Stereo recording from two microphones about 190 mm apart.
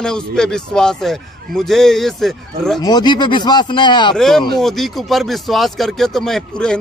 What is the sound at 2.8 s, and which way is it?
Speech, 20° left (ahead or behind).